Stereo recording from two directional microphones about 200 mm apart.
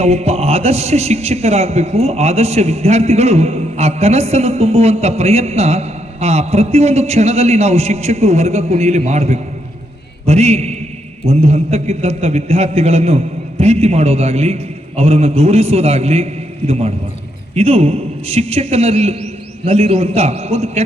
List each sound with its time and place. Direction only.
0.0 s a man's voice: 30° right (ahead or behind)